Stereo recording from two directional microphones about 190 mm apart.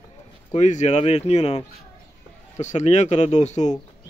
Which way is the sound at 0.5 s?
40° left (ahead or behind).